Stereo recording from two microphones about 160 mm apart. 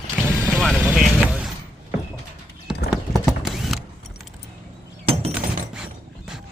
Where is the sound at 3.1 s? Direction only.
Centre (ahead or behind).